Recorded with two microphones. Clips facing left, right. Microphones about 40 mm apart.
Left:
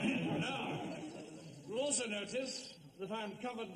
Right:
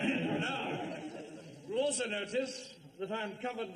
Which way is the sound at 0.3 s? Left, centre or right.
Right.